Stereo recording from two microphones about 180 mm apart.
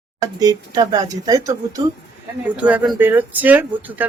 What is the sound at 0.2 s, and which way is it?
Speech, 20° right (ahead or behind).